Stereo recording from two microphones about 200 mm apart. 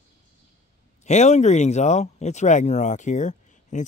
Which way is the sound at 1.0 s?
35° left (ahead or behind).